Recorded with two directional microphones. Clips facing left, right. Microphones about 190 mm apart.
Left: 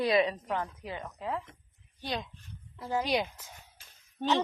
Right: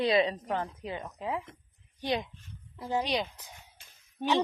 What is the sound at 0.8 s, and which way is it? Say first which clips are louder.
A woman's voice: right 2 dB; 20° right (ahead or behind).